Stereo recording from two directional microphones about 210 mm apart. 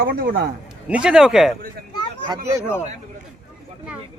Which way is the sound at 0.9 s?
5° right (ahead or behind).